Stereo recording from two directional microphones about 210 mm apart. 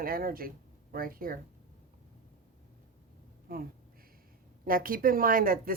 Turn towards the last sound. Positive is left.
turn(degrees=-40)  # may be behind; listen again after turning